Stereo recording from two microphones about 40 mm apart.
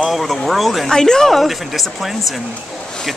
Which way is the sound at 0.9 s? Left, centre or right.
Centre.